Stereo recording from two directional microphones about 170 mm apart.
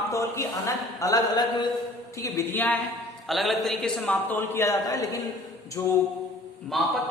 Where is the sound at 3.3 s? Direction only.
Centre (ahead or behind).